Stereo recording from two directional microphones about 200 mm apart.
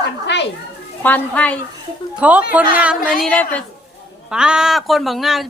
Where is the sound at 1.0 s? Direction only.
5° left (ahead or behind).